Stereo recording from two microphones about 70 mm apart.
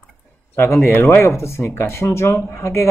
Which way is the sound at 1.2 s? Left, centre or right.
Left.